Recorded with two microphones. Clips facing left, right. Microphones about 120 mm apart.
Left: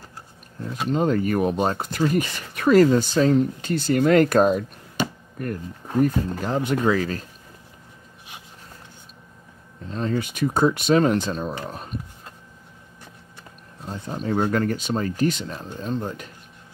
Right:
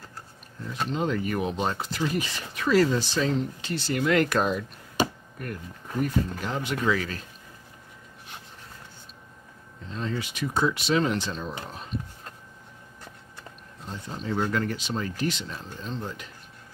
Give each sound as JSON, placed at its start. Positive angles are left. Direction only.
{"t": 0.8, "sound": "speech", "side_deg": 45}
{"t": 9.8, "sound": "speech", "side_deg": 45}
{"t": 13.8, "sound": "speech", "side_deg": 50}